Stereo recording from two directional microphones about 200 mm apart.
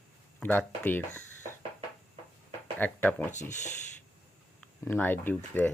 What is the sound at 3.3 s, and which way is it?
Speech, 35° left (ahead or behind).